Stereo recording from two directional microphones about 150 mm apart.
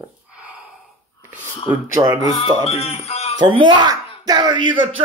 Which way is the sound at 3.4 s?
30° right (ahead or behind).